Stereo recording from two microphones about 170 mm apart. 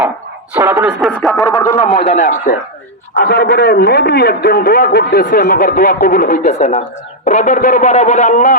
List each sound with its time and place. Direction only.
0.5 s speech: 10° right (ahead or behind)
1.1 s a sound: centre (ahead or behind)
1.5 s speech: 20° left (ahead or behind)
2.0 s speech: 45° left (ahead or behind)
3.2 s a man's voice: 70° left (ahead or behind); by 8.5 s 50° left (ahead or behind)